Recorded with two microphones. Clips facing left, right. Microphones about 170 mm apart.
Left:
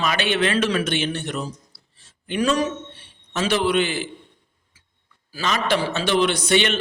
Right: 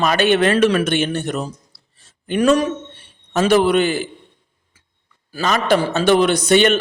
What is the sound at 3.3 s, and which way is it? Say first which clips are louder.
Speech: right 7 dB; 45° right (ahead or behind).